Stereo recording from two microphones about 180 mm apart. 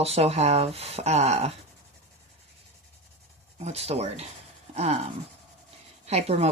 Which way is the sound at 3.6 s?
35° right (ahead or behind).